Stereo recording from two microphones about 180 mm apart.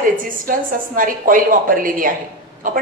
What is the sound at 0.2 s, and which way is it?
A woman's voice, 50° right (ahead or behind).